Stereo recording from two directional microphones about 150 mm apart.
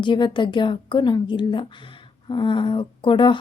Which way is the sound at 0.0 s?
30° left (ahead or behind).